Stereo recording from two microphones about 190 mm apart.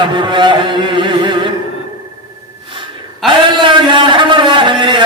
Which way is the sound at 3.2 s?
25° right (ahead or behind).